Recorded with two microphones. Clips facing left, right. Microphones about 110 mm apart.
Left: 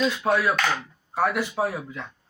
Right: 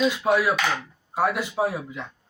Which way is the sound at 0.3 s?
15° right (ahead or behind).